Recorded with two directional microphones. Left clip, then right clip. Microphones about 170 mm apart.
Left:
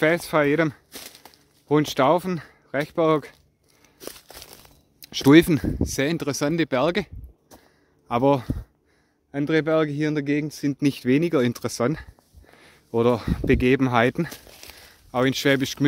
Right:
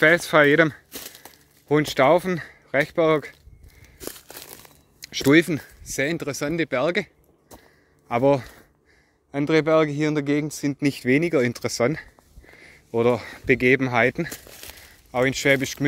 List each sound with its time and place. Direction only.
0.0 s speech: 15° left (ahead or behind)
0.9 s a sound: 70° right (ahead or behind)
1.7 s speech: 30° left (ahead or behind)
4.0 s crumpling: 65° right (ahead or behind)
5.0 s speech: 45° left (ahead or behind)
8.1 s speech: 35° left (ahead or behind)
14.3 s a sound: 55° right (ahead or behind)
14.9 s speech: 45° left (ahead or behind)